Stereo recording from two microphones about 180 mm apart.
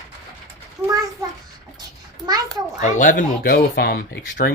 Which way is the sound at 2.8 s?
45° left (ahead or behind).